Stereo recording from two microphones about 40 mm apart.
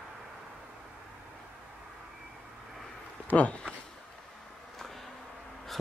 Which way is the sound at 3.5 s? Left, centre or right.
Left.